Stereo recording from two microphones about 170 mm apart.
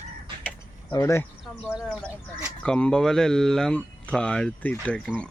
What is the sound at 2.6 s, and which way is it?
Speech, 5° left (ahead or behind).